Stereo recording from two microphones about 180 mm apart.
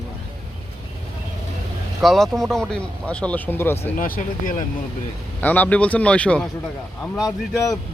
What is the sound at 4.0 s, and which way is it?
Speech, 50° left (ahead or behind).